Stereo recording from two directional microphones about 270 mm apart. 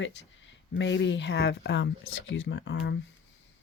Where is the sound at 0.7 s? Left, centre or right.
Left.